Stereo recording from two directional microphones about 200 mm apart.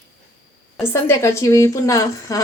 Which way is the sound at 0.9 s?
15° left (ahead or behind).